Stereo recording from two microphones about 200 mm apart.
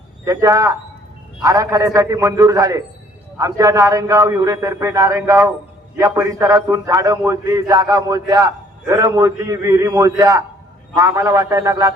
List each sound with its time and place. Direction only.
0.3 s a man's voice: 15° right (ahead or behind)